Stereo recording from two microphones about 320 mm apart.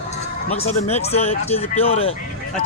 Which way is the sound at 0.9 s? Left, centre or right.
Centre.